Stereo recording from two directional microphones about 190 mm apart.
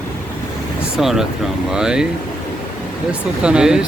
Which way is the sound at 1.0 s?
Centre (ahead or behind).